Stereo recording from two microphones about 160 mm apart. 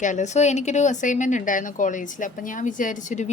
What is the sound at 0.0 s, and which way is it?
Speech, 50° left (ahead or behind).